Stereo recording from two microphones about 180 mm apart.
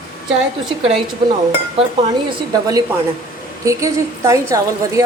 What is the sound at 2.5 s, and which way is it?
A woman's voice, 20° right (ahead or behind).